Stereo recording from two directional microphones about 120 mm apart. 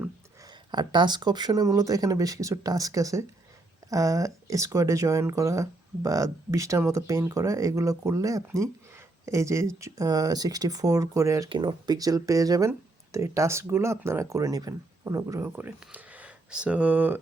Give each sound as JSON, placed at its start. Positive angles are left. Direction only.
{"t": 0.7, "sound": "speech", "side_deg": -40}
{"t": 11.4, "sound": "speech", "side_deg": -40}